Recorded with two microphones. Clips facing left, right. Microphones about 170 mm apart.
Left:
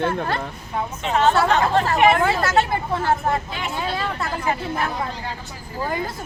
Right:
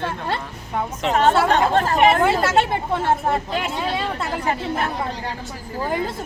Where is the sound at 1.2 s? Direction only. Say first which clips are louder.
Right 1 dB; 45° right (ahead or behind).